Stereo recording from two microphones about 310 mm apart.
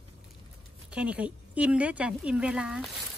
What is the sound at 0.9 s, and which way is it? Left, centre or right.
A woman's voice, centre.